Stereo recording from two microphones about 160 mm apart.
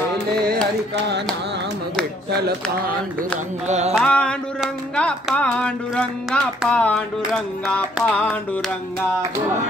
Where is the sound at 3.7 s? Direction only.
45° right (ahead or behind).